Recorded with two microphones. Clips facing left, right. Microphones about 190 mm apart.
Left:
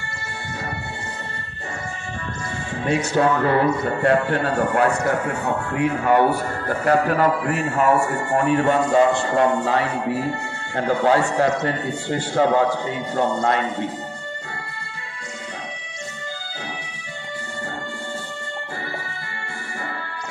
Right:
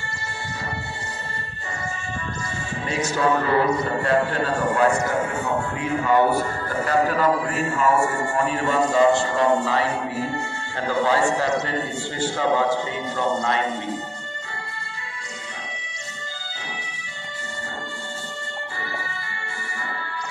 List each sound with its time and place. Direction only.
2.9 s a man's voice: 55° left (ahead or behind)